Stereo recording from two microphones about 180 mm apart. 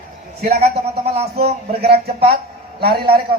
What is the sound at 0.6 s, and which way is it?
Mantra, 35° right (ahead or behind).